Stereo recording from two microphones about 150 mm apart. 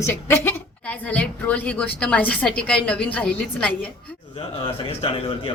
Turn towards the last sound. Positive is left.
turn(degrees=35)  # may be behind; listen again after turning